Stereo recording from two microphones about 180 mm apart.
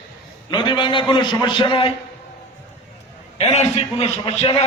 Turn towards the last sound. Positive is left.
turn(degrees=35)  # may be behind; listen again after turning